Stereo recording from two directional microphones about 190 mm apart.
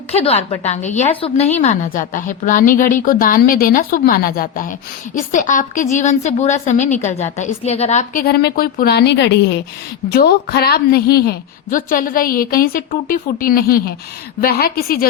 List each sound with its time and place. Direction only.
0.1 s a woman's voice: 35° left (ahead or behind)
8.2 s a woman's voice: 55° left (ahead or behind)